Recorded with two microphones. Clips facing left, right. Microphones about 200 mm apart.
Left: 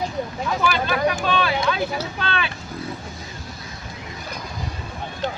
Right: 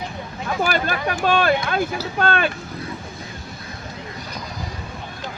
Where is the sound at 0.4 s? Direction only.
45° right (ahead or behind).